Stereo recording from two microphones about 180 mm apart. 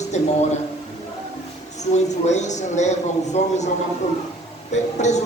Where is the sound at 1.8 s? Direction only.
40° left (ahead or behind).